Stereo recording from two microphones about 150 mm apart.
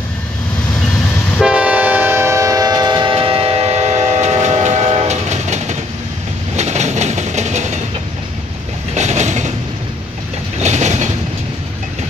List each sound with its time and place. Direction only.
1.4 s train: 5° right (ahead or behind); by 7.8 s 50° right (ahead or behind)
8.9 s train: 50° right (ahead or behind)
10.6 s vehicle: 50° right (ahead or behind)